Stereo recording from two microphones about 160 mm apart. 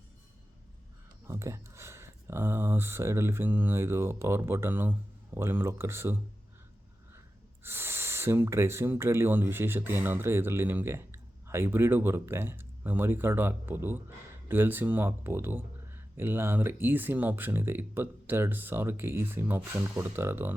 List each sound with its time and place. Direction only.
1.3 s speech: 20° right (ahead or behind)
7.6 s speech: 15° right (ahead or behind)